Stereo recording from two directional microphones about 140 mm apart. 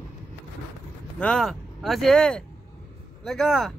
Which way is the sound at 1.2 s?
5° left (ahead or behind).